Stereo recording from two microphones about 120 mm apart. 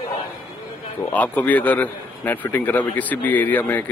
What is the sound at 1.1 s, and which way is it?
A man's voice, 15° left (ahead or behind).